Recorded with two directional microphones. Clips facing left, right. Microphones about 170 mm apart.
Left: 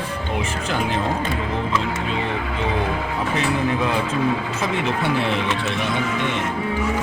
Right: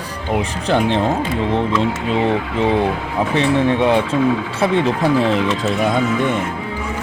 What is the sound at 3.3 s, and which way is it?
Speech, 30° right (ahead or behind).